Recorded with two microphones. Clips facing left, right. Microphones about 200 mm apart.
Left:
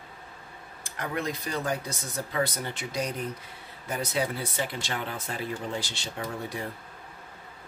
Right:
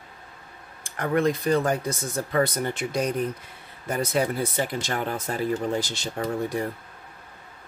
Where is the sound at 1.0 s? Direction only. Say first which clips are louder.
Right 9 dB; 55° right (ahead or behind).